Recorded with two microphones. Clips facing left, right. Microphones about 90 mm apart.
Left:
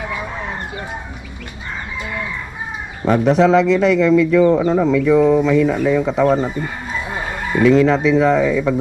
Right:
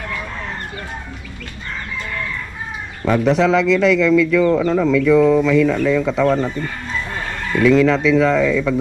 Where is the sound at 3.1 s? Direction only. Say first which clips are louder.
Left 2 dB; 35° left (ahead or behind); by 7.6 s 15° left (ahead or behind).